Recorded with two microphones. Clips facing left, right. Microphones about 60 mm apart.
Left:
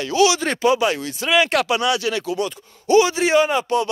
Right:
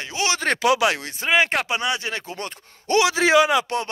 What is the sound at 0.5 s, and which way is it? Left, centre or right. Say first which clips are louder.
Speech: even; right.